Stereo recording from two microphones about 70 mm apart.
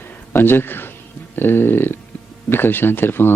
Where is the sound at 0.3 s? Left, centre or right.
Left.